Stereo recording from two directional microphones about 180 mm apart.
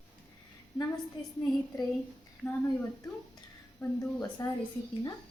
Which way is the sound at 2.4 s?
5° right (ahead or behind).